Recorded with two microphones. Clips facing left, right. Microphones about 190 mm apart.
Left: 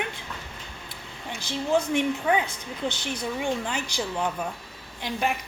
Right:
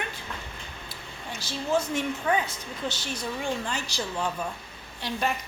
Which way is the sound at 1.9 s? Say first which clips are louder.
Left 3 dB; 15° left (ahead or behind).